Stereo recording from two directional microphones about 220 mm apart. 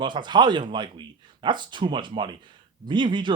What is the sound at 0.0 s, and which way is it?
A man's voice, 20° right (ahead or behind).